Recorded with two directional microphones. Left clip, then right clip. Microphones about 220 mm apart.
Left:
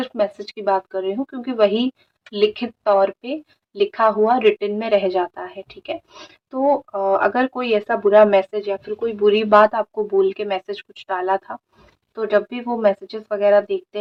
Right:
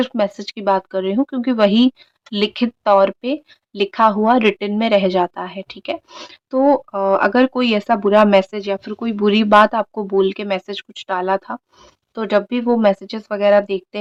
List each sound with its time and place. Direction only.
0.0 s speech: 35° right (ahead or behind)